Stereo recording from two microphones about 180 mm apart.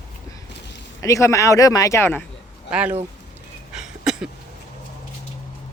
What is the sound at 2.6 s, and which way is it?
Speech, 5° right (ahead or behind).